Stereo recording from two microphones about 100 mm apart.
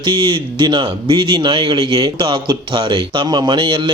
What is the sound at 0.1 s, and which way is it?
Speech, 50° right (ahead or behind).